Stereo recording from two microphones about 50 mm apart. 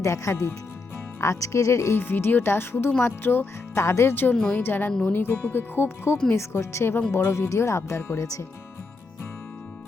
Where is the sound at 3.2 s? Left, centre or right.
Left.